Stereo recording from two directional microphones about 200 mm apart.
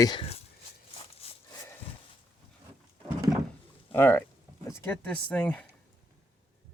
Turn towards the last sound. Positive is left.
turn(degrees=5)  # may be behind; listen again after turning